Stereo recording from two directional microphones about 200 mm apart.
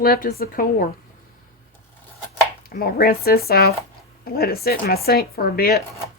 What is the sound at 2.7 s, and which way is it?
Speech, 50° left (ahead or behind).